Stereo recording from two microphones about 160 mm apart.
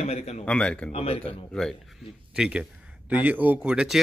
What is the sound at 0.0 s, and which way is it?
Speech, 40° left (ahead or behind).